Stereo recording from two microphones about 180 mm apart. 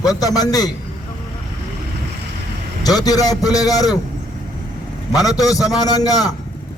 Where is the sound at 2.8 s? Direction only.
20° left (ahead or behind).